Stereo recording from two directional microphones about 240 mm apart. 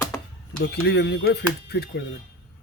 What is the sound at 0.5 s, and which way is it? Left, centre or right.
Speech, left.